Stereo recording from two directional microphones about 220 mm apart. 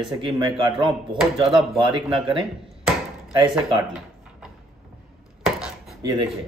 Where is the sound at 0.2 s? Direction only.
20° right (ahead or behind).